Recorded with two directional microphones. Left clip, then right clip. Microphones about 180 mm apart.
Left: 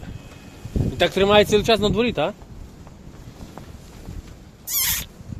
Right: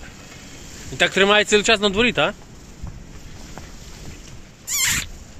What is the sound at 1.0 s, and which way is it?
Speech, 10° left (ahead or behind).